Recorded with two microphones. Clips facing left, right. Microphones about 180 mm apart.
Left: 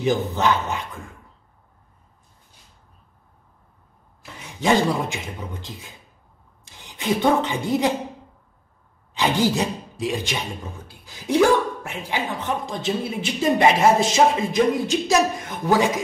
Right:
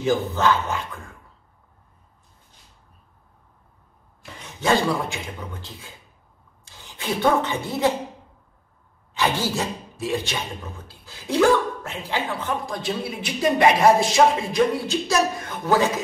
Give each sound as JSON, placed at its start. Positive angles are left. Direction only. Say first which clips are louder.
{"t": 0.0, "sound": "speech", "louder": "even", "side_deg": 20}
{"t": 4.6, "sound": "speech", "louder": "left 2 dB", "side_deg": 15}
{"t": 9.1, "sound": "speech", "louder": "left 3 dB", "side_deg": 15}